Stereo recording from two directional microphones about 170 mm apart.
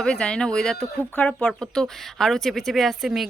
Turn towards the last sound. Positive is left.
turn(degrees=0)  # may be behind; listen again after turning